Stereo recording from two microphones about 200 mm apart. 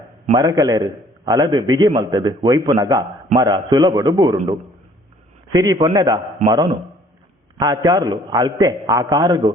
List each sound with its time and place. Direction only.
0.3 s a man's voice: 15° right (ahead or behind)
5.5 s a man's voice: 20° right (ahead or behind)